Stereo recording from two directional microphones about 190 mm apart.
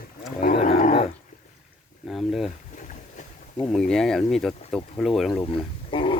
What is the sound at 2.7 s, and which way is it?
Boat, 40° left (ahead or behind).